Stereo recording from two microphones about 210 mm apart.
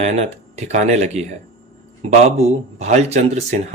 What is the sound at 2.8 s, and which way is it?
Speech, 30° right (ahead or behind).